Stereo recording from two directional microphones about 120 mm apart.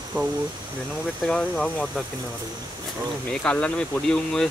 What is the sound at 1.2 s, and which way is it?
Speech, 10° left (ahead or behind).